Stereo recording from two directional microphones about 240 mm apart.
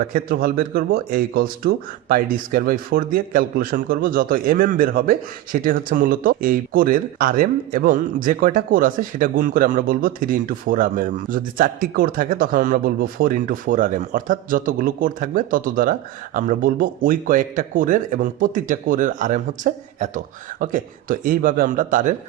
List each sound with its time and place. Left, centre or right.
0.1 s speech: right